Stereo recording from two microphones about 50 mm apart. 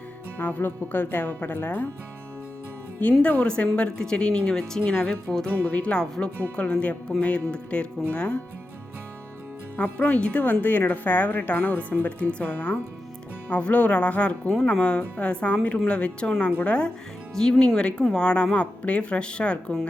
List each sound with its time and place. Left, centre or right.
0.3 s speech: left
3.0 s speech: left; by 5.5 s centre
5.6 s speech: left
9.7 s speech: left
10.4 s speech: left
17.3 s speech: centre